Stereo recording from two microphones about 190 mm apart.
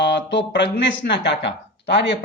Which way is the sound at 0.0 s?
65° left (ahead or behind).